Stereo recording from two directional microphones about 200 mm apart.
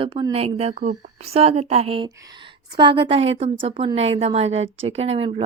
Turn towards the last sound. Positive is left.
turn(degrees=-30)  # may be behind; listen again after turning